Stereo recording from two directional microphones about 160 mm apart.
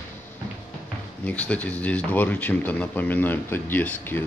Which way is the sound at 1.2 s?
10° left (ahead or behind).